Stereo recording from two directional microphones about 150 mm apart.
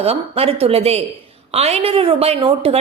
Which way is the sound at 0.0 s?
40° right (ahead or behind).